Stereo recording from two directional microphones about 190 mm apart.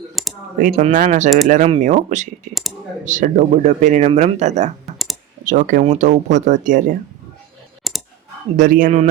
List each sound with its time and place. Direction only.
0.2 s computer keyboard: centre (ahead or behind)
0.7 s a man's voice: 40° right (ahead or behind)
7.9 s clicking: centre (ahead or behind)
8.5 s a man's voice: 45° right (ahead or behind)